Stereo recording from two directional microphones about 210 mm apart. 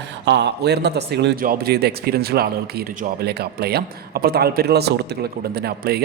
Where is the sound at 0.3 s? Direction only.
55° right (ahead or behind).